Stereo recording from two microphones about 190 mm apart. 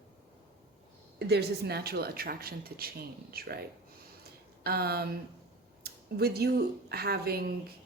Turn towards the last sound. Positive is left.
turn(degrees=-55)  # may be behind; listen again after turning